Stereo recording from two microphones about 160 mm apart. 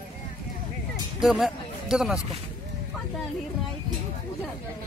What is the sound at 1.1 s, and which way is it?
A man's voice, centre (ahead or behind).